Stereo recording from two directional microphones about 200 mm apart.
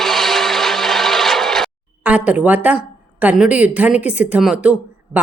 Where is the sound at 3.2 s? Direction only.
5° right (ahead or behind).